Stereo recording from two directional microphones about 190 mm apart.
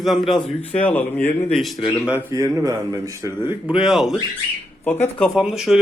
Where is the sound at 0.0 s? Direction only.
Centre (ahead or behind).